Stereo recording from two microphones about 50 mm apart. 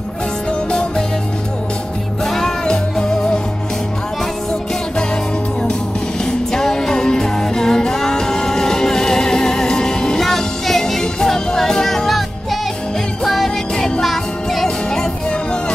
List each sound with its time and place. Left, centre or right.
0.7 s music: centre
2.2 s music: centre
6.5 s music: centre
13.2 s music: centre